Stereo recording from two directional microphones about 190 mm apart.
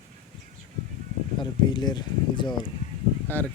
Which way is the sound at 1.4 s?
25° left (ahead or behind).